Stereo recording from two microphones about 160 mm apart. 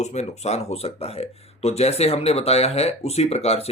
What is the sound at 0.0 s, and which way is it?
Speech, 45° left (ahead or behind).